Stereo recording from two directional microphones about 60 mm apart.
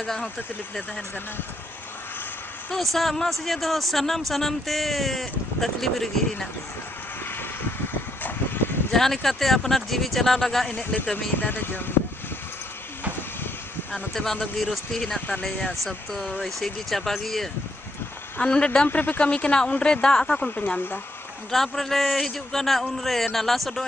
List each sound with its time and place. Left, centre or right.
0.0 s speech: centre
2.7 s speech: centre
8.2 s vehicle: left
8.9 s speech: centre
10.7 s speech: left
11.4 s speech: left
14.1 s speech: centre
15.0 s speech: left
16.1 s speech: centre
18.4 s speech: centre
18.9 s speech: left; by 20.3 s centre
20.3 s speech: left
21.5 s speech: centre